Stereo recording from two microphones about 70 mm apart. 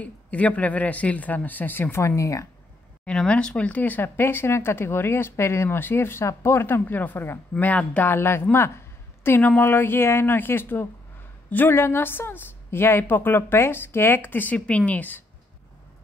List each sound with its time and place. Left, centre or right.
0.0 s speech: left
3.1 s speech: centre
8.1 s speech: left